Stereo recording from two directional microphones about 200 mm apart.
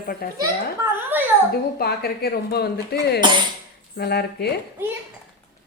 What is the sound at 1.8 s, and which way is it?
Speech, 50° left (ahead or behind).